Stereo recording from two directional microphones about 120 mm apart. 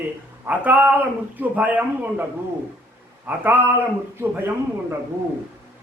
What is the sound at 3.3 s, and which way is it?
Speech, 15° right (ahead or behind).